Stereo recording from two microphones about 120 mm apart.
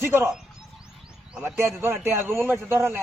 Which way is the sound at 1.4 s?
20° right (ahead or behind).